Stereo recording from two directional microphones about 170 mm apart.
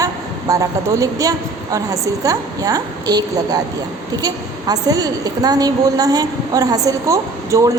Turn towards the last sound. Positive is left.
turn(degrees=-20)  # may be behind; listen again after turning